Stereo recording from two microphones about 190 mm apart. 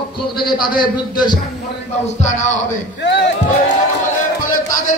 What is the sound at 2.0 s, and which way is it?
Speech, 40° left (ahead or behind).